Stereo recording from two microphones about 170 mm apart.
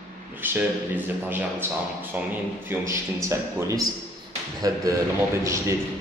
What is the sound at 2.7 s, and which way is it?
A man's voice, 15° right (ahead or behind).